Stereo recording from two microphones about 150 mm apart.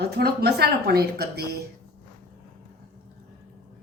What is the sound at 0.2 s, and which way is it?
A woman's voice, 90° right.